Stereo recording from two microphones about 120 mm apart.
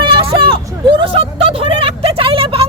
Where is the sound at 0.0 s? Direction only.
45° right (ahead or behind).